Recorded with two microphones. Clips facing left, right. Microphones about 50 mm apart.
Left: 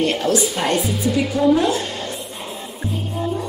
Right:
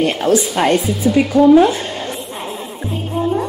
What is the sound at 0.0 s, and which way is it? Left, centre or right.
Speech, right.